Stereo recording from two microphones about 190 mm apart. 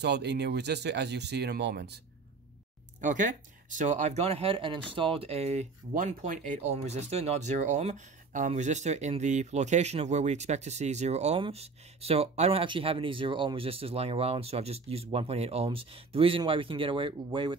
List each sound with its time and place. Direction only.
0.0 s speech: 60° right (ahead or behind)
3.0 s speech: 40° right (ahead or behind); by 17.6 s 25° right (ahead or behind)